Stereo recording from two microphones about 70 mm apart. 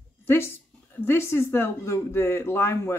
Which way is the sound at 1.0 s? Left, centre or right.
Left.